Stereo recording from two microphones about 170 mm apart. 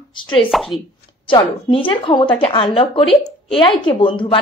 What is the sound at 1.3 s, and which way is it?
A woman's voice, 30° left (ahead or behind).